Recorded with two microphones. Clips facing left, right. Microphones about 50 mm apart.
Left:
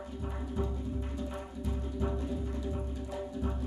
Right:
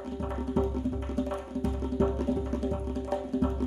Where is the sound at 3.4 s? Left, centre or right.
Right.